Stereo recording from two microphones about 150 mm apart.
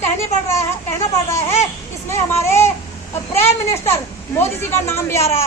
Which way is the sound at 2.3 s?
15° left (ahead or behind).